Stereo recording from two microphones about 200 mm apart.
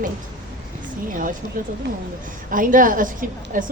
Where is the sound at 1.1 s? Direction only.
45° right (ahead or behind).